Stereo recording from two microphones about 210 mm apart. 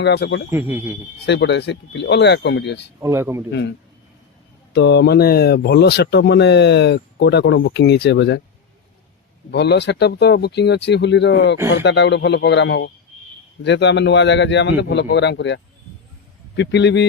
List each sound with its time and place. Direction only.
0.0 s a man's voice: 55° left (ahead or behind)
0.5 s a man's voice: 10° right (ahead or behind)
1.2 s a man's voice: 55° left (ahead or behind)
3.0 s a man's voice: 10° right (ahead or behind)
4.7 s speech: 55° left (ahead or behind)
9.5 s a man's voice: 50° left (ahead or behind)